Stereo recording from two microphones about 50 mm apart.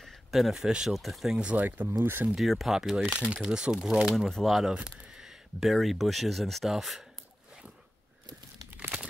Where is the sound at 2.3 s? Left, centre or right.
Centre.